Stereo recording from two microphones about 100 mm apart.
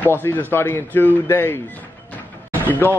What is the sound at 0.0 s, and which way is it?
Speech, 20° left (ahead or behind).